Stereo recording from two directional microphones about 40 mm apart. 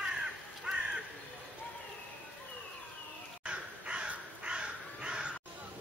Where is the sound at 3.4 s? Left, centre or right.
Right.